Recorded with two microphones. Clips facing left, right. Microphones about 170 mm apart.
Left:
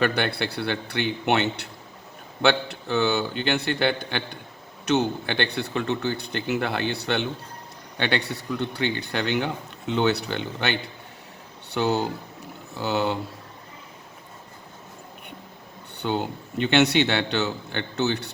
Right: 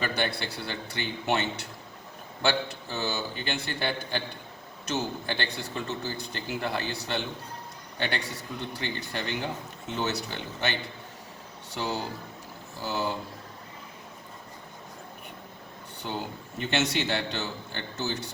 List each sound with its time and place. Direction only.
0.0 s a man's voice: 65° left (ahead or behind)
16.0 s a man's voice: 70° left (ahead or behind)